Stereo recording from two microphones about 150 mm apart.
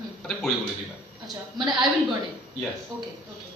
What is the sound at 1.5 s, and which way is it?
Speech, 30° right (ahead or behind).